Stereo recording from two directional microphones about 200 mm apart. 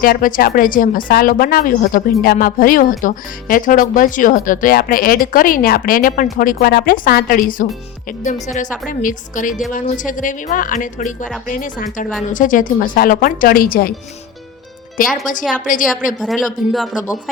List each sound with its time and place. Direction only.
0.0 s speech: 45° left (ahead or behind)
15.0 s speech: 45° left (ahead or behind)
16.2 s a man's voice: centre (ahead or behind)